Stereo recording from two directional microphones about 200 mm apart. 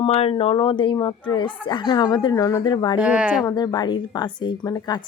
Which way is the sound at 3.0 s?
5° right (ahead or behind).